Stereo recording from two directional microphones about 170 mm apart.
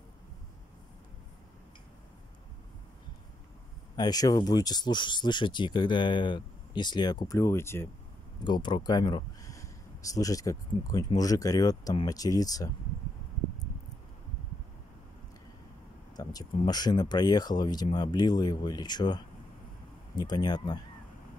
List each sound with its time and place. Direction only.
3.9 s speech: 25° left (ahead or behind)
8.5 s speech: 25° left (ahead or behind)
16.2 s speech: 20° left (ahead or behind)